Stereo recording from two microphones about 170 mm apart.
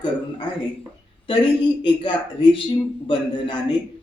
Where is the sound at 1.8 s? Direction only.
30° left (ahead or behind).